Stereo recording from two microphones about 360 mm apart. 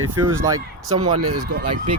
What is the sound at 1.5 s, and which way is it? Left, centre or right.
Speech, right.